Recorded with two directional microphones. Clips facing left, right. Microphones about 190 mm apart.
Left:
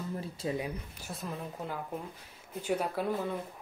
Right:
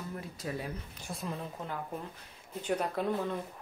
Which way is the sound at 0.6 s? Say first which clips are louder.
Left 3 dB; 10° left (ahead or behind).